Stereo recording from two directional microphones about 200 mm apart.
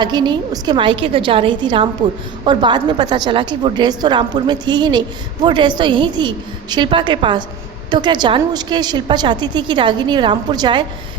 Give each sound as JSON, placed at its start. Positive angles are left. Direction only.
{"t": 0.0, "sound": "a woman's voice", "side_deg": -20}